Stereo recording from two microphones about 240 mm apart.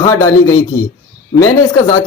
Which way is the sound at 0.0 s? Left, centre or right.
Centre.